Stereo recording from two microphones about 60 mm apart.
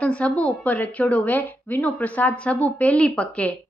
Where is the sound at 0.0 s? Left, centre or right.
Left.